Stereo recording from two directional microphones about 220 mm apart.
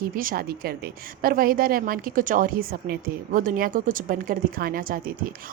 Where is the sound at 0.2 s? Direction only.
40° right (ahead or behind).